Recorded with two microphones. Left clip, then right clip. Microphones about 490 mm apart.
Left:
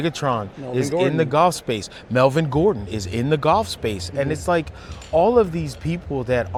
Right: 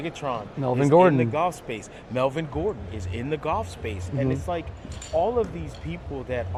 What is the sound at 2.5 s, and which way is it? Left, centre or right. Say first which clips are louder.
Speech: left 9 dB; left.